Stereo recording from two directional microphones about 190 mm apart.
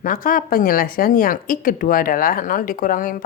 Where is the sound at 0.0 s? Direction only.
45° left (ahead or behind).